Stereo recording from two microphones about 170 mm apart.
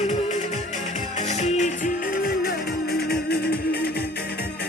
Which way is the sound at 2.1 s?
60° left (ahead or behind).